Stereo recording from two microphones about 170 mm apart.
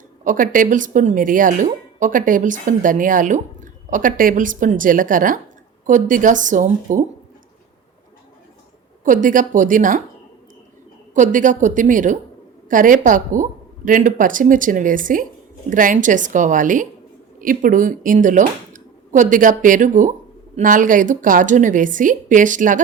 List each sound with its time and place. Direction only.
0.3 s speech: 50° right (ahead or behind)
9.0 s speech: 50° right (ahead or behind)
11.1 s speech: 50° right (ahead or behind)